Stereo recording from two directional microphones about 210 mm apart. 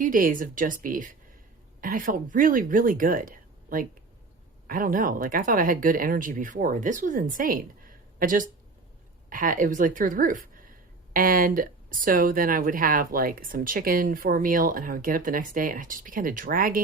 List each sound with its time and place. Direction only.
0.0 s speech: 40° right (ahead or behind)